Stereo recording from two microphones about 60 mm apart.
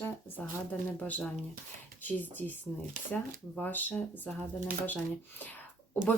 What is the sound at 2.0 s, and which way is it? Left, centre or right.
Speech, left.